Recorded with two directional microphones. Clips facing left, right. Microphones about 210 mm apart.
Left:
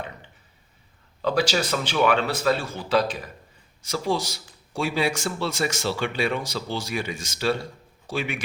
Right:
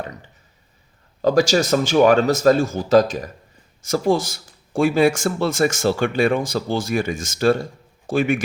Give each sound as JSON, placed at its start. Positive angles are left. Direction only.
{"t": 1.2, "sound": "a man's voice", "side_deg": -45}